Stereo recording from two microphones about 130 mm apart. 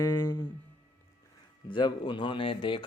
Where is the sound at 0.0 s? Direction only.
30° left (ahead or behind).